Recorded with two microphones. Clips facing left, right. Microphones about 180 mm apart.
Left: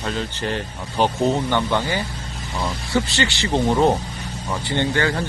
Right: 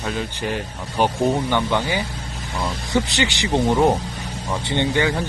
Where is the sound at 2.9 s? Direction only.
15° right (ahead or behind).